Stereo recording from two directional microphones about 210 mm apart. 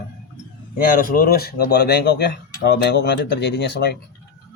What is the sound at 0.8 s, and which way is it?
Speech, 40° left (ahead or behind).